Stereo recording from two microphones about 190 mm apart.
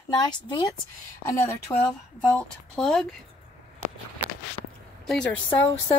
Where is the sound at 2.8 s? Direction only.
Centre (ahead or behind).